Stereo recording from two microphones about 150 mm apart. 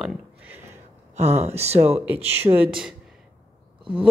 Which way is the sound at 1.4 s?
45° right (ahead or behind).